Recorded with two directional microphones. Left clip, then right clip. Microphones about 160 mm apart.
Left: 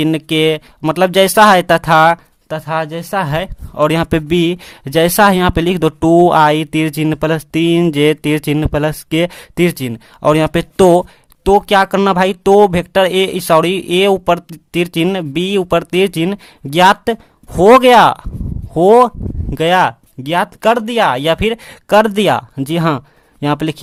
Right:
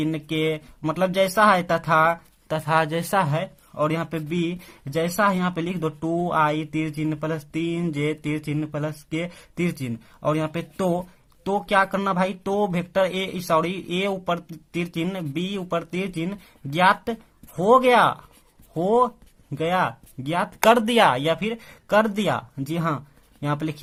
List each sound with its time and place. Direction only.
0.0 s speech: 45° left (ahead or behind)
2.5 s speech: 20° left (ahead or behind)
3.2 s speech: 45° left (ahead or behind)
20.7 s speech: 25° left (ahead or behind)
21.2 s speech: 45° left (ahead or behind)